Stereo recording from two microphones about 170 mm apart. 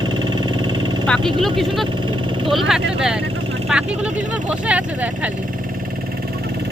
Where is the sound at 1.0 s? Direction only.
5° left (ahead or behind).